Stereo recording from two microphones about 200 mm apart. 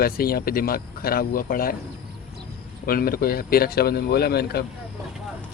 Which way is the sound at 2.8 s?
50° left (ahead or behind).